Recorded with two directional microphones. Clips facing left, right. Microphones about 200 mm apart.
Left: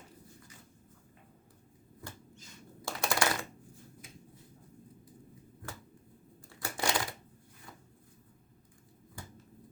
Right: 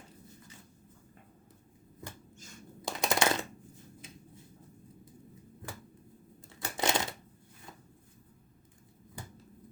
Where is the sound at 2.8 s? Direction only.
20° right (ahead or behind).